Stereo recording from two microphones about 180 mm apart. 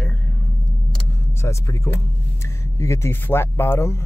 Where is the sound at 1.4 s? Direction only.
15° left (ahead or behind).